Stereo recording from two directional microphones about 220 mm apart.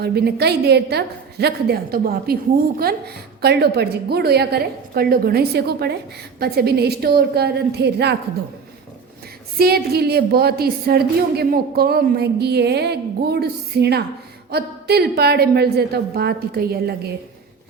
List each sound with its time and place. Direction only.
0.0 s a woman's voice: 45° right (ahead or behind)
9.6 s a woman's voice: 45° right (ahead or behind)